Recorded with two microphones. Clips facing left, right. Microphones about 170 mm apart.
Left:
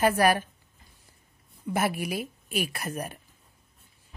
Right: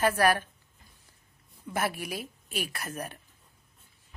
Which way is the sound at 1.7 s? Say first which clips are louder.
Left 4 dB; 10° left (ahead or behind).